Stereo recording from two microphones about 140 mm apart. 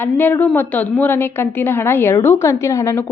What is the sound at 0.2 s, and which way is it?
A woman's voice, 15° left (ahead or behind).